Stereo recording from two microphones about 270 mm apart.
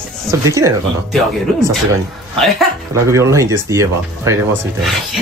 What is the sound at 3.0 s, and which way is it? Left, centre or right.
Speech, centre.